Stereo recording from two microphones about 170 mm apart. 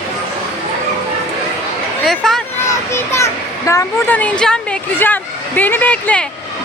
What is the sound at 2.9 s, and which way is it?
A child's voice, 15° left (ahead or behind).